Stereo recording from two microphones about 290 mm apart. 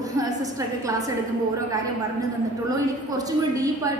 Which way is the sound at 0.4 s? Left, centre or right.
Centre.